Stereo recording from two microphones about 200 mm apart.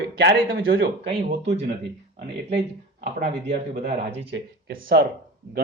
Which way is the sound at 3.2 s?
40° right (ahead or behind).